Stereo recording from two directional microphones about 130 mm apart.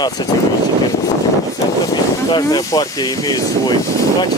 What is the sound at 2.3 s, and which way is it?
Speech, 30° left (ahead or behind).